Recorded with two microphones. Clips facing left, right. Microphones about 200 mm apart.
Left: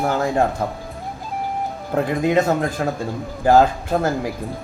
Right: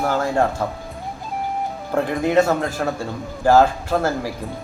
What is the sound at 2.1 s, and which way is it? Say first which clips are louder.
Speech: right 1 dB; 15° left (ahead or behind).